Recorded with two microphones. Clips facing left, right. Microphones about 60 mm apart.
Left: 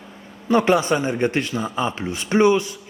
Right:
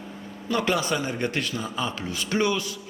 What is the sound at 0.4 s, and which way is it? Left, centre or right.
A man's voice, left.